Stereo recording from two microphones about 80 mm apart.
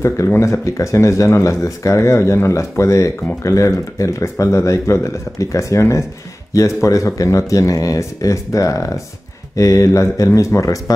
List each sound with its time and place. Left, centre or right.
0.3 s speech: left